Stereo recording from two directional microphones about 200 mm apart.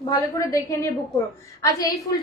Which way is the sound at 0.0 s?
20° left (ahead or behind).